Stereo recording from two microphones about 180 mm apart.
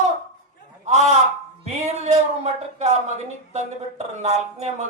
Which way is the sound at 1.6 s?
40° right (ahead or behind).